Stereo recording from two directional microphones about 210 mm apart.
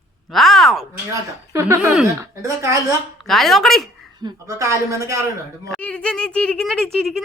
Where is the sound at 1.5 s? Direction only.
15° right (ahead or behind).